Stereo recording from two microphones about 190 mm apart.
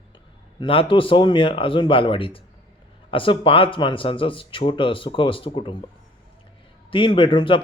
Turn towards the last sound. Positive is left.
turn(degrees=25)  # may be behind; listen again after turning